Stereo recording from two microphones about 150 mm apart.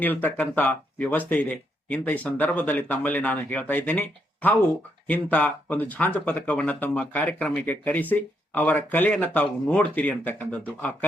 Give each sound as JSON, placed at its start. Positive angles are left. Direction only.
{"t": 0.0, "sound": "speech", "side_deg": 10}